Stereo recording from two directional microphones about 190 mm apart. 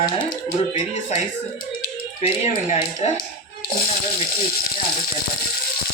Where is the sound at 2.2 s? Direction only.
30° left (ahead or behind).